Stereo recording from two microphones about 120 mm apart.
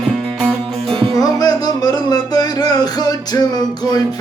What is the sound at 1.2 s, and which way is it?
Music, 35° left (ahead or behind).